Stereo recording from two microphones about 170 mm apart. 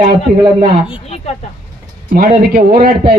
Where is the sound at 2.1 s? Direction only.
60° right (ahead or behind).